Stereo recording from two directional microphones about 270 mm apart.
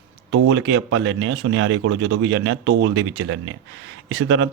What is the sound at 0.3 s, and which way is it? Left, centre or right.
Speech, right.